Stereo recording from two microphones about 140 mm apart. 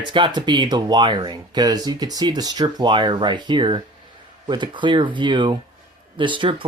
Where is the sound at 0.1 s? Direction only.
35° right (ahead or behind).